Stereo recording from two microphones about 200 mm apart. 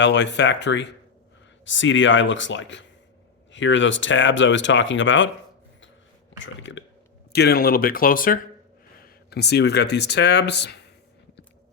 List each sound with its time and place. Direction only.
0.0 s speech: 60° left (ahead or behind)
6.4 s speech: 65° left (ahead or behind)
7.3 s speech: 50° left (ahead or behind)